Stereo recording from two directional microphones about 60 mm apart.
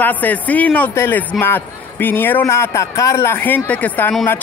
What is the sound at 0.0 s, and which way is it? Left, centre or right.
Speech, left.